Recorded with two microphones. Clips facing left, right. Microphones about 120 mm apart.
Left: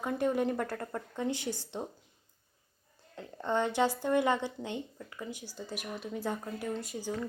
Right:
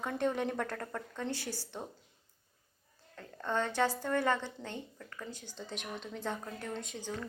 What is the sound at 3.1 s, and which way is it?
Speech, 20° left (ahead or behind).